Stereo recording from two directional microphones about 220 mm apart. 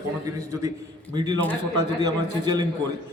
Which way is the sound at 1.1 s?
15° right (ahead or behind).